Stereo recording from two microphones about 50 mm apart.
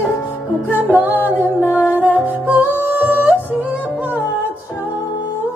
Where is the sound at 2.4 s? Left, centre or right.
Right.